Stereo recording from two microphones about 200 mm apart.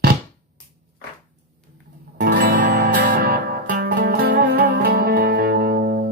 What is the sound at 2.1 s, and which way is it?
Music, 55° right (ahead or behind).